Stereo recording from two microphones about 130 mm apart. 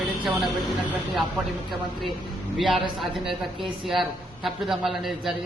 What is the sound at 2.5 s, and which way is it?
Speech, centre (ahead or behind).